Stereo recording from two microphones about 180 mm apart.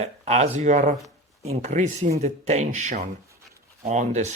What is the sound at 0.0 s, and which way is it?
Speech, 35° right (ahead or behind).